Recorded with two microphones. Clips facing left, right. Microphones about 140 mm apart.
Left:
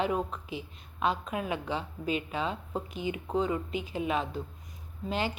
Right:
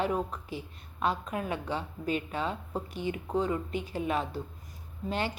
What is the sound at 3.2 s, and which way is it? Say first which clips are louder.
Speech: left 1 dB; centre (ahead or behind).